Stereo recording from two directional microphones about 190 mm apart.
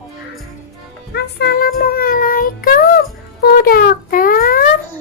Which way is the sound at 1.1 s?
55° left (ahead or behind).